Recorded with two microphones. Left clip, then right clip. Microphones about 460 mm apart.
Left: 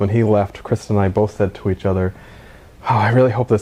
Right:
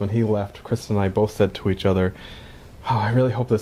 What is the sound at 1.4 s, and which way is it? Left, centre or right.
Speech, centre.